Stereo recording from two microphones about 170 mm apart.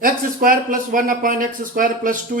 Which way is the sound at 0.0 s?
55° right (ahead or behind).